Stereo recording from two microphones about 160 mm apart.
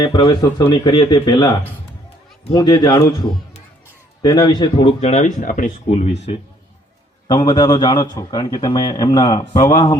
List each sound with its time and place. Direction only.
0.0 s a man's voice: 25° left (ahead or behind)
4.2 s speech: 25° left (ahead or behind); by 6.1 s 50° left (ahead or behind)
7.3 s a man's voice: 25° left (ahead or behind)